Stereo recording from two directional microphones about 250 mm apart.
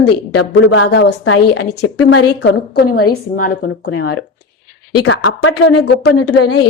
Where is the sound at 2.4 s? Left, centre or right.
Left.